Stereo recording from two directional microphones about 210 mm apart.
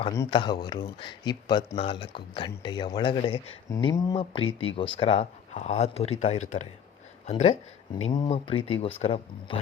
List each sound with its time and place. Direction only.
0.1 s speech: 20° left (ahead or behind)